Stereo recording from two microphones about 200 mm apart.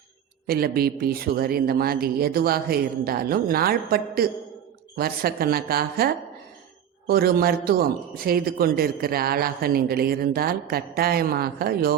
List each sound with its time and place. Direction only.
0.4 s a man's voice: 50° right (ahead or behind)